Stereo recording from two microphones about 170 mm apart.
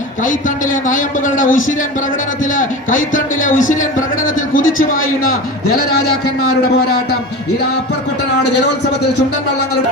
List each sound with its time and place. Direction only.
0.2 s a man's voice: 50° left (ahead or behind)
5.3 s a man's voice: 65° left (ahead or behind)